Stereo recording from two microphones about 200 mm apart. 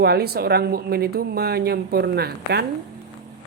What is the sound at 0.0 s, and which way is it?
Speech, 50° right (ahead or behind).